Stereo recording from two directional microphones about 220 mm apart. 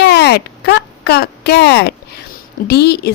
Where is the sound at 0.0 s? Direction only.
50° left (ahead or behind).